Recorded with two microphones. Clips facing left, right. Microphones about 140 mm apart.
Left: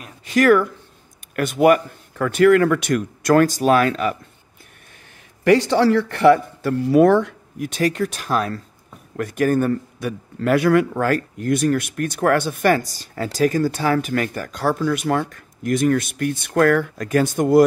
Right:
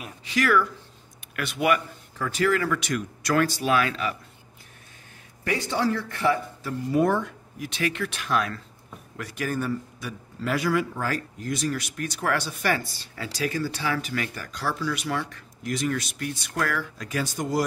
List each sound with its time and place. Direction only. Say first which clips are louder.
0.2 s a man's voice: left 8 dB; 50° left (ahead or behind)
5.4 s speech: left 11 dB; 90° left
7.5 s speech: left 8 dB; 50° left (ahead or behind)
9.1 s a man's voice: left 11 dB; 50° left (ahead or behind)